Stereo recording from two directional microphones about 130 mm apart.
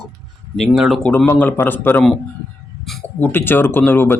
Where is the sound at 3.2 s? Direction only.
15° left (ahead or behind).